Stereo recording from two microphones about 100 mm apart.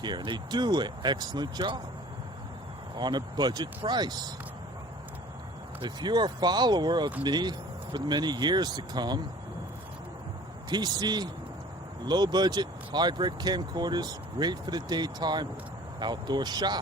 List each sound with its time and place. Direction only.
0.0 s speech: 50° right (ahead or behind)
2.9 s speech: 45° right (ahead or behind)
5.8 s speech: 45° right (ahead or behind)
10.7 s speech: 45° right (ahead or behind)